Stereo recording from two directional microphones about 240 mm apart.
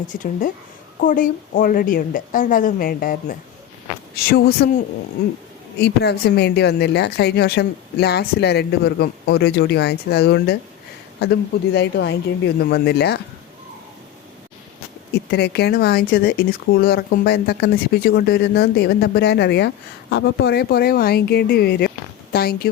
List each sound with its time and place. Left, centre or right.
0.1 s speech: left
5.7 s speech: left
15.1 s speech: left